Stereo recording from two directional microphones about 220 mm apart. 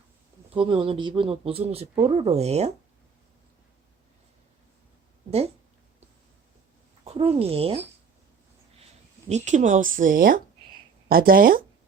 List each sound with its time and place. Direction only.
0.5 s speech: 25° right (ahead or behind)
7.0 s speech: 25° right (ahead or behind)
9.3 s speech: 30° right (ahead or behind)